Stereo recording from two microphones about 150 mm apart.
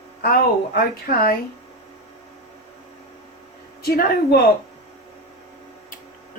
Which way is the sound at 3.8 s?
90° left.